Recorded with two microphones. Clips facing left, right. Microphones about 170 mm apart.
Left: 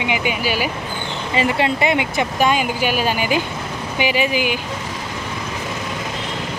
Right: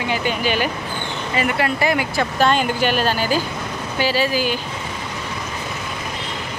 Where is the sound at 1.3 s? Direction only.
25° left (ahead or behind).